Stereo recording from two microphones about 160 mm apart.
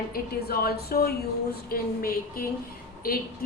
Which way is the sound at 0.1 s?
75° left (ahead or behind).